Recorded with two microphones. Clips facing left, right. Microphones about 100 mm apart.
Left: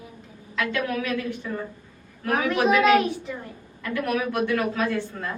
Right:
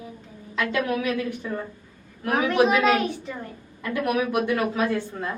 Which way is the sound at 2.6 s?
Centre (ahead or behind).